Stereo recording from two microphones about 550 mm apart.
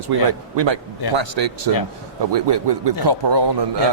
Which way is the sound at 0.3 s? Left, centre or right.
Right.